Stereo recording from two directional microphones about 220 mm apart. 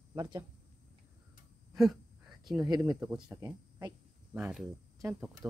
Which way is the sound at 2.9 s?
5° right (ahead or behind).